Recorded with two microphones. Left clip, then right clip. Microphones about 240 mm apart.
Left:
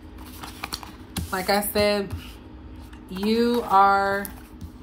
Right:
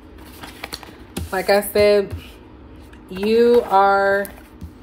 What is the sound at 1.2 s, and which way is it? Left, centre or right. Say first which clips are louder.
Speech: right 6 dB; centre.